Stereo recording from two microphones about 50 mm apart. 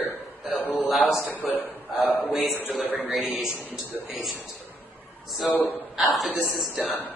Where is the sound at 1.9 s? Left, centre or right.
Centre.